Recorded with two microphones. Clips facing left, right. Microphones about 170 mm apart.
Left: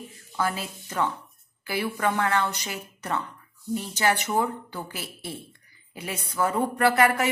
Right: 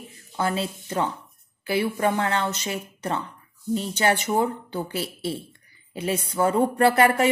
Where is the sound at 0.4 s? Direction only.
30° right (ahead or behind).